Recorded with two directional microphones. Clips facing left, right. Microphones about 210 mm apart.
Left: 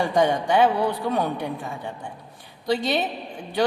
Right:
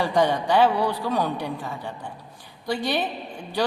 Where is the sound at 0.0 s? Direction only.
20° left (ahead or behind).